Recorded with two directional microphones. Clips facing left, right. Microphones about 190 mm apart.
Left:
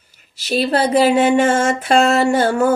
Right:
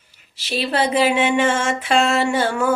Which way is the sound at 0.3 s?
45° left (ahead or behind).